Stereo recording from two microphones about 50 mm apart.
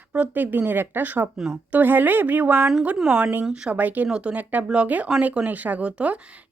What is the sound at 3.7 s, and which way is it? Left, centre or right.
Speech, right.